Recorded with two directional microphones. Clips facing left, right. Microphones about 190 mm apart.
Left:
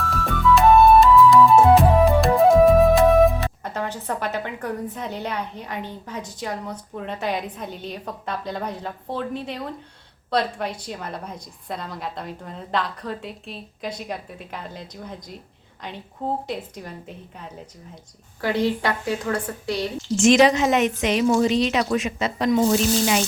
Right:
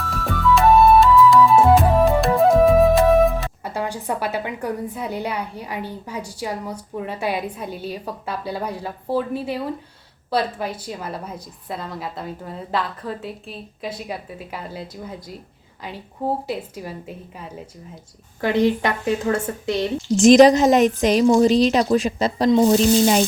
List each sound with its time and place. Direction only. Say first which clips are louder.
0.0 s music: even; centre (ahead or behind)
3.7 s a woman's voice: right 5 dB; 10° right (ahead or behind)
16.5 s a woman's voice: right 3 dB; 5° right (ahead or behind)
18.3 s a woman's voice: right 4 dB; 20° right (ahead or behind)
20.1 s a woman's voice: right 5 dB; 40° right (ahead or behind)
22.4 s a woman's voice: right 4 dB; 25° right (ahead or behind)
22.7 s a woman's voice: right 5 dB; 35° right (ahead or behind)